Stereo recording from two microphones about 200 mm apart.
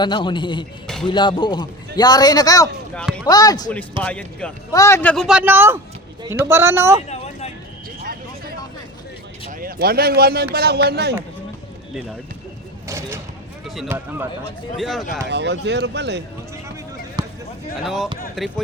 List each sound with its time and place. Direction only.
0.0 s a man's voice: 25° left (ahead or behind)
2.9 s speech: 5° left (ahead or behind)
3.2 s a man's voice: 20° left (ahead or behind)
4.0 s a man's voice: 5° left (ahead or behind); by 7.0 s 15° right (ahead or behind)
8.0 s vehicle: 50° right (ahead or behind)
9.5 s speech: 45° right (ahead or behind)
12.9 s a sound: 15° right (ahead or behind)
13.8 s speech: 10° right (ahead or behind)
14.8 s a man's voice: centre (ahead or behind)
15.3 s speech: 60° right (ahead or behind)
17.2 s basketball bounce: 20° right (ahead or behind)
17.8 s a man's voice: centre (ahead or behind)